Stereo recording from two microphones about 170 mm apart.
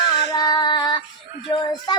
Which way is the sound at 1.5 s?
25° left (ahead or behind).